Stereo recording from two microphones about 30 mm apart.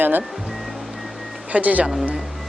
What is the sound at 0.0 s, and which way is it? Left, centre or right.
Speech, right.